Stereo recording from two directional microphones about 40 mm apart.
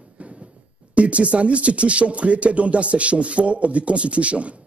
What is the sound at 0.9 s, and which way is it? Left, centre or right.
A man's voice, right.